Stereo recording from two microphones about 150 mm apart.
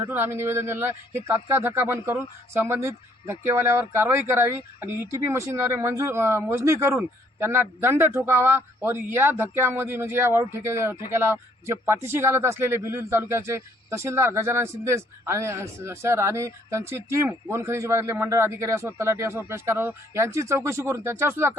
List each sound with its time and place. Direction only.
0.0 s speech: 15° right (ahead or behind)